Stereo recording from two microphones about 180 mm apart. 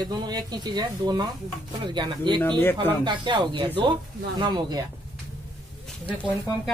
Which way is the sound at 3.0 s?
25° right (ahead or behind).